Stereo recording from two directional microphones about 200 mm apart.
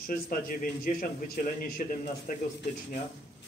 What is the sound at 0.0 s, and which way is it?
A man's voice, 45° left (ahead or behind).